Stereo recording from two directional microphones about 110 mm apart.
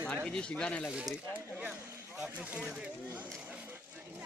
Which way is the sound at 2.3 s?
10° right (ahead or behind).